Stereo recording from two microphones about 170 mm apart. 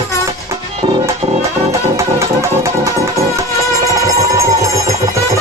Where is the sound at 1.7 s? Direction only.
15° right (ahead or behind).